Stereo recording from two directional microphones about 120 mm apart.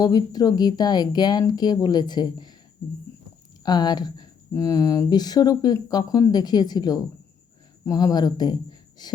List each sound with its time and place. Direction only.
0.0 s speech: 35° left (ahead or behind)
3.6 s speech: 35° left (ahead or behind)